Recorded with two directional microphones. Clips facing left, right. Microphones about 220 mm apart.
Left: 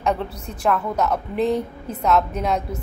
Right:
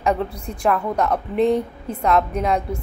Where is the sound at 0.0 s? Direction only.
Centre (ahead or behind).